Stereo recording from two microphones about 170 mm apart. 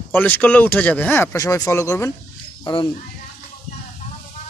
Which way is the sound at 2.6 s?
30° left (ahead or behind).